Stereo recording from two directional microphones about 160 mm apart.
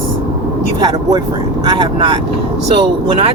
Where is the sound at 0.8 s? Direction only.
25° right (ahead or behind).